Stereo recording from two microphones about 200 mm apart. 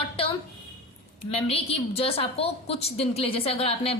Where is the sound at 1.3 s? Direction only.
30° left (ahead or behind).